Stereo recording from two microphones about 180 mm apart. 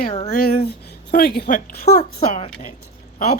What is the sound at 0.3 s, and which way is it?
Speech, 55° left (ahead or behind).